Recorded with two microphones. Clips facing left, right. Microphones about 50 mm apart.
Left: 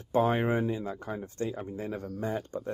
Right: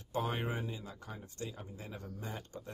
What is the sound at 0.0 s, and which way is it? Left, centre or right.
Speech, left.